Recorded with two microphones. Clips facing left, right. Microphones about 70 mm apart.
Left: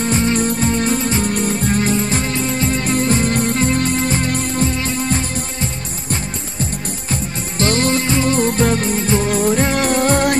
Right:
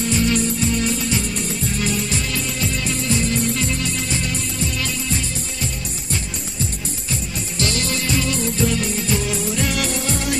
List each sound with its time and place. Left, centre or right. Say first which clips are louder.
0.0 s music: left 3 dB; left
7.1 s music: left 4 dB; left
8.4 s music: left 5 dB; left